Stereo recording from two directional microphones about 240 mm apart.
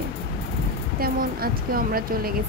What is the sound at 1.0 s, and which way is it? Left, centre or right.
Speech, right.